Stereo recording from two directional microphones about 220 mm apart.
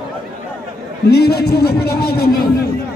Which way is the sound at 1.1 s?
45° left (ahead or behind).